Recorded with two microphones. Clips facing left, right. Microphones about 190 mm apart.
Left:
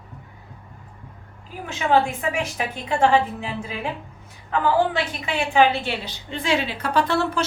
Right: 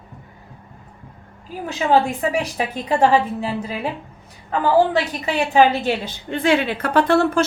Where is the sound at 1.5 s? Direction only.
35° right (ahead or behind).